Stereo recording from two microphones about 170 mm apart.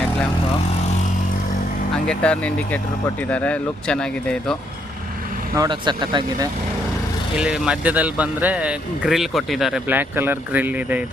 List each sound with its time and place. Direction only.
2.0 s speech: 5° left (ahead or behind)
5.5 s speech: 25° right (ahead or behind)
7.3 s speech: 5° right (ahead or behind)